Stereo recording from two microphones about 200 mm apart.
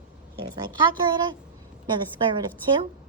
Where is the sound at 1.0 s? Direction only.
20° right (ahead or behind).